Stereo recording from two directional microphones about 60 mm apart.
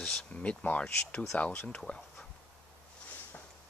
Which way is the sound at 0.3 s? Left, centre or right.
Left.